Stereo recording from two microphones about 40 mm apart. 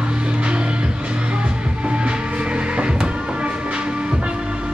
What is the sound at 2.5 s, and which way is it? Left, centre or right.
Music, right.